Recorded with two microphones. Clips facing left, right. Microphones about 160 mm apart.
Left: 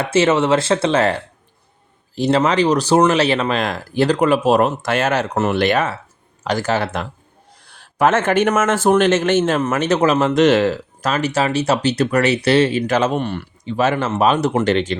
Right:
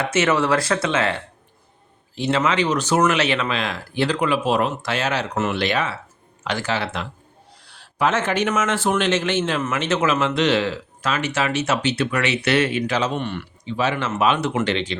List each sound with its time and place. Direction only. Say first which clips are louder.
0.0 s speech: left 4 dB; 30° left (ahead or behind)
12.9 s speech: left 5 dB; 50° left (ahead or behind)